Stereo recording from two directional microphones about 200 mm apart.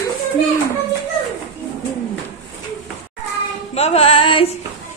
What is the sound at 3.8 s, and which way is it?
Speech, 30° left (ahead or behind).